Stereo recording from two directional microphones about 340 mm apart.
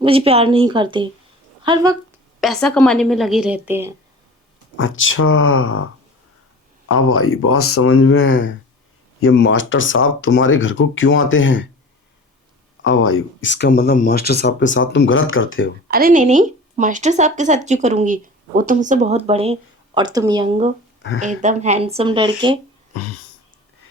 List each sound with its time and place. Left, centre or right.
0.0 s speech: centre
2.4 s a woman's voice: centre
4.8 s speech: left
12.8 s speech: left
15.9 s speech: right
22.9 s a sound: left